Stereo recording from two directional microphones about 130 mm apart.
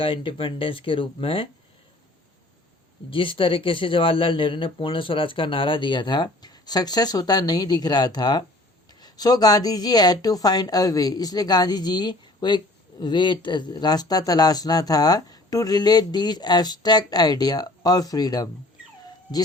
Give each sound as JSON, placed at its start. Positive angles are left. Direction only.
{"t": 0.0, "sound": "speech", "side_deg": 45}
{"t": 3.1, "sound": "speech", "side_deg": 40}